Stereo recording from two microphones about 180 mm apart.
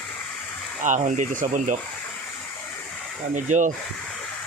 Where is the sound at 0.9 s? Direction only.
45° right (ahead or behind).